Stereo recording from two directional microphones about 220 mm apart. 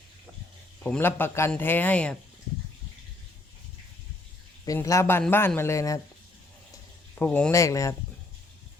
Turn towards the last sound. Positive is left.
turn(degrees=15)  # may be behind; listen again after turning